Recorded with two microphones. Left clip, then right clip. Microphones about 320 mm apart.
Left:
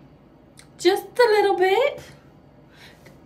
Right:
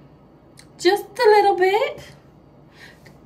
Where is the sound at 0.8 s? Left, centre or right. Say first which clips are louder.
Right 2 dB; centre.